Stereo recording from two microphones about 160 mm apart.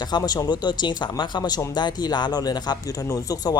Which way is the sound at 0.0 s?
25° left (ahead or behind).